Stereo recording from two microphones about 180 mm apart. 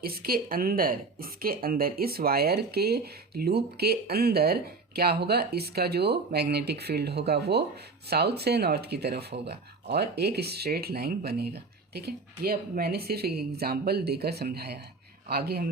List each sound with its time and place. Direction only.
0.0 s speech: 55° right (ahead or behind)